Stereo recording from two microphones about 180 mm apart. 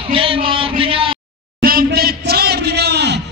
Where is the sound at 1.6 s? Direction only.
55° right (ahead or behind).